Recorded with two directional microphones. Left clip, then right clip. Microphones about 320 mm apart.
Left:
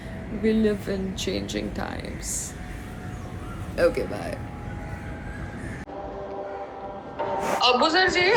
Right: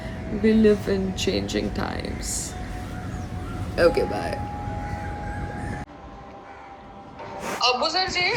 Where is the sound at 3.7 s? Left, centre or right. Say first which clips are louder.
Right 3 dB; centre.